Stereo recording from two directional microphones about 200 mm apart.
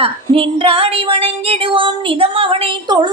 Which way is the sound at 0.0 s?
25° right (ahead or behind).